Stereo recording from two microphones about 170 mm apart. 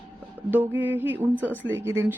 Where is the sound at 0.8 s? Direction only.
10° right (ahead or behind).